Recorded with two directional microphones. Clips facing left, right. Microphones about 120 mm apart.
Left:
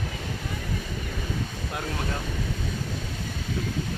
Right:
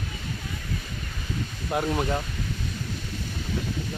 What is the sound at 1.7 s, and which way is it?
Speech, 25° right (ahead or behind).